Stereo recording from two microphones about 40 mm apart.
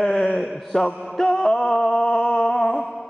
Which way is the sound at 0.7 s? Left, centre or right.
Centre.